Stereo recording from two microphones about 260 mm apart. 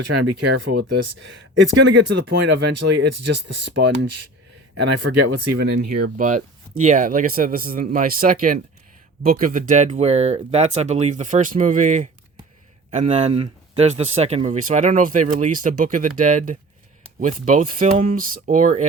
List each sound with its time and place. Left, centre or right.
0.0 s speech: right
0.6 s speech: right
0.9 s speech: right
3.5 s speech: right
5.1 s speech: right
5.6 s speech: right